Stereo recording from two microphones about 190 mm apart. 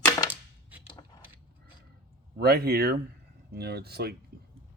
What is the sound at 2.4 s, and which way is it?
Speech, 55° right (ahead or behind).